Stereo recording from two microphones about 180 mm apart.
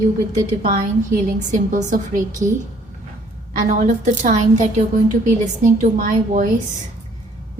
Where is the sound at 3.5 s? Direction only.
45° right (ahead or behind).